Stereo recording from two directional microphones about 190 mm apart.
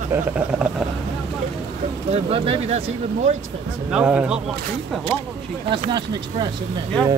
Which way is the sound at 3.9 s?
5° right (ahead or behind).